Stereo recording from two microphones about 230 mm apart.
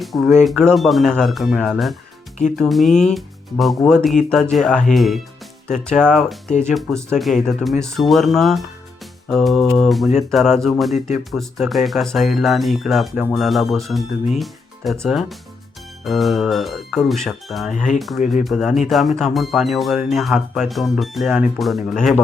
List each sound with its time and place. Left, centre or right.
0.0 s speech: centre
14.3 s music: centre
15.0 s speech: centre
17.7 s speech: left
18.4 s speech: centre